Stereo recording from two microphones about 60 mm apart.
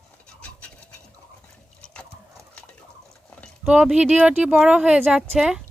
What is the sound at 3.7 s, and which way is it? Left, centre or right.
Speech, centre.